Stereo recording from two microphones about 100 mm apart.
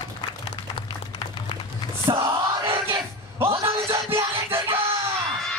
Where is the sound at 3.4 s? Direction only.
70° right (ahead or behind).